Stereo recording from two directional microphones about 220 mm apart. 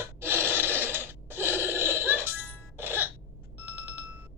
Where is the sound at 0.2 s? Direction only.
10° right (ahead or behind).